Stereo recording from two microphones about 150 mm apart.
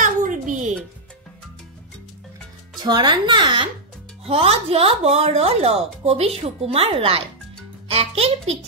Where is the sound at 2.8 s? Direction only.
30° right (ahead or behind).